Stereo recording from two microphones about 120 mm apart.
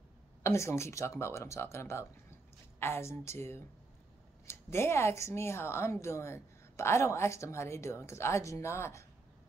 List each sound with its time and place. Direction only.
0.4 s speech: 25° left (ahead or behind)